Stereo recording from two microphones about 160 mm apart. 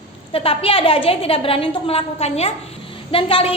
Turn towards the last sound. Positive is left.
turn(degrees=35)  # may be behind; listen again after turning